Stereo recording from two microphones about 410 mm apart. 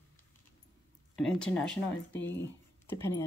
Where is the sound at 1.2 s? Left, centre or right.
Centre.